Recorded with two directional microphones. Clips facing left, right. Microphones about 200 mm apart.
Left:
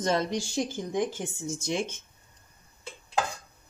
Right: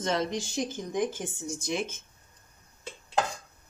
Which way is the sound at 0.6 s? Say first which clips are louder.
Left 1 dB; 25° left (ahead or behind).